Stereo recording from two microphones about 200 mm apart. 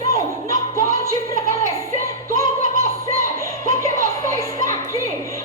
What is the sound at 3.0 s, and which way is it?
Music, 15° left (ahead or behind).